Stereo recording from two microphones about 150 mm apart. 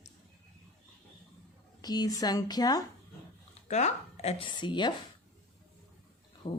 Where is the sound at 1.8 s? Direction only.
25° left (ahead or behind).